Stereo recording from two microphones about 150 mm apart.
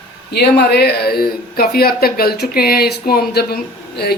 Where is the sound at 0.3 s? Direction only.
90° left.